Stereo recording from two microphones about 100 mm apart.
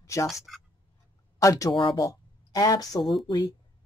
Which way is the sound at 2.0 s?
35° left (ahead or behind).